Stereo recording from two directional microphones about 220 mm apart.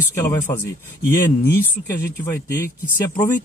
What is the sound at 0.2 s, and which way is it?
Speech, 10° left (ahead or behind).